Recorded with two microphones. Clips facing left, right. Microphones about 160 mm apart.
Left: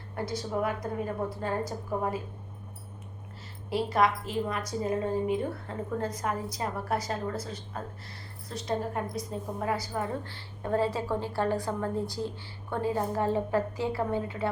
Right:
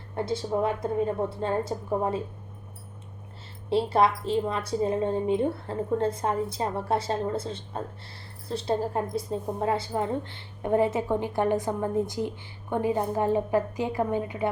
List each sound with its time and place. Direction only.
0.2 s a woman's voice: 25° right (ahead or behind)
3.7 s a woman's voice: 30° right (ahead or behind)